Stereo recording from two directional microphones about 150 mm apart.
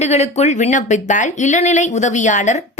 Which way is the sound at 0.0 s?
45° left (ahead or behind).